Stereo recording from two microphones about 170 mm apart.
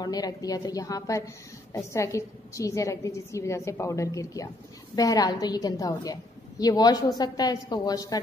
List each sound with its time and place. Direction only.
0.0 s a woman's voice: 20° left (ahead or behind)